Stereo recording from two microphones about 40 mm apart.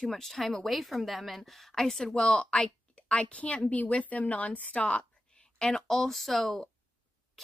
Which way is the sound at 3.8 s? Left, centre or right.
Left.